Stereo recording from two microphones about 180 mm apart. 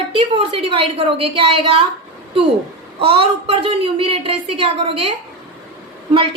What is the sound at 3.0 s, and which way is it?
A woman's voice, 30° right (ahead or behind).